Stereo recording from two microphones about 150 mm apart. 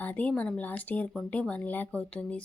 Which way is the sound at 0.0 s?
10° left (ahead or behind).